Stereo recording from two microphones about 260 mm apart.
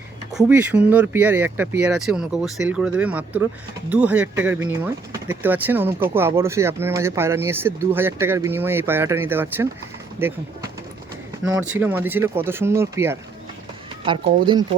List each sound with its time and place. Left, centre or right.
0.3 s speech: centre